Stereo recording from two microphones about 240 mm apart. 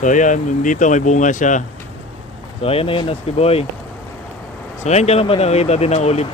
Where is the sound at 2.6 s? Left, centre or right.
Left.